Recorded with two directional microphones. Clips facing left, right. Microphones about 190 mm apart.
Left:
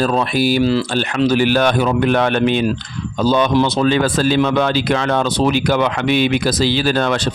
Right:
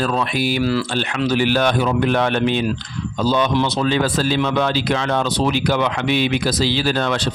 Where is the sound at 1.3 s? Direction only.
45° left (ahead or behind).